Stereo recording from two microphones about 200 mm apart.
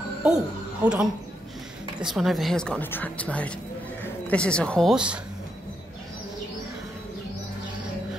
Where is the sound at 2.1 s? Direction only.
Centre (ahead or behind).